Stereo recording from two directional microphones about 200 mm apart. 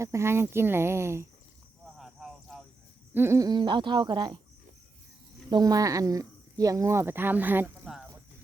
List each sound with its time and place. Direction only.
0.0 s speech: 15° right (ahead or behind)
2.0 s cricket: centre (ahead or behind)
3.2 s speech: 15° right (ahead or behind)
5.5 s speech: 20° right (ahead or behind)